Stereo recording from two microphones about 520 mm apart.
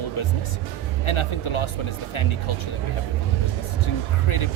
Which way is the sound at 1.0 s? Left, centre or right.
Left.